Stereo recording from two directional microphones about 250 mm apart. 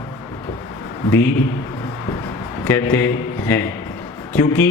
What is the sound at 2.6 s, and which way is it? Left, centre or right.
A man's voice, centre.